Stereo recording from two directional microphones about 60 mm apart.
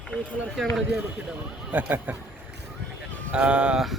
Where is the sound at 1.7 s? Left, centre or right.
Right.